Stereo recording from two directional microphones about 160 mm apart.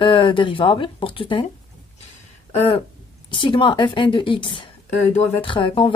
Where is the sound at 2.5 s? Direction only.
35° left (ahead or behind).